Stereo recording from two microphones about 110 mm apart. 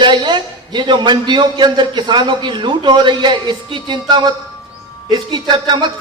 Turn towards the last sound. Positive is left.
turn(degrees=-40)  # may be behind; listen again after turning